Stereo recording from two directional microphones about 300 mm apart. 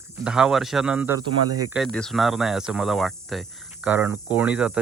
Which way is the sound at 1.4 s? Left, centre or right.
Right.